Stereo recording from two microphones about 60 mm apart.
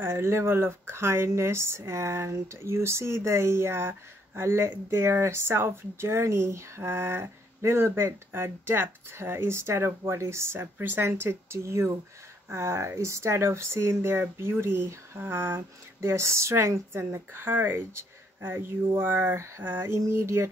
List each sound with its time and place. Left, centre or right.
0.0 s speech: right